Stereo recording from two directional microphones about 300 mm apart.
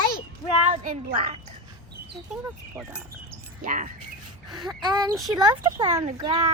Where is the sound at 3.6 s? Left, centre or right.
Right.